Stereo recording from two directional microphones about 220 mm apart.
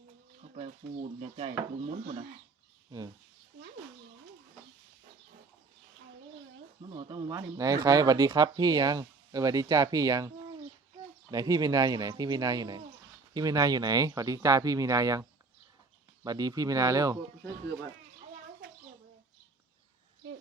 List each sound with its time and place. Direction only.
1.2 s speech: 25° right (ahead or behind)
6.8 s speech: 25° right (ahead or behind)